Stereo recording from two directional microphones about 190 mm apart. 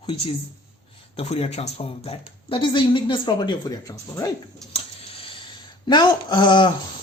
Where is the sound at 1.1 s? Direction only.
35° left (ahead or behind).